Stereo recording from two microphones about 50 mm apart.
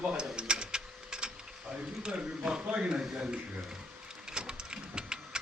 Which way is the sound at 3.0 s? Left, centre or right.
Centre.